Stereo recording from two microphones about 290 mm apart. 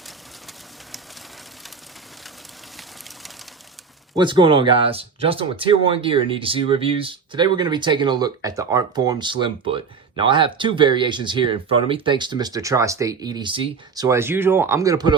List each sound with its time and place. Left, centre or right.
4.1 s speech: centre